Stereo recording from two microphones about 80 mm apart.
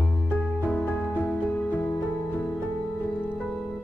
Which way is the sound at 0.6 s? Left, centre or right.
Left.